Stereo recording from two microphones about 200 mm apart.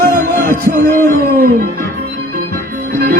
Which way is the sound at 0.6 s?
45° right (ahead or behind).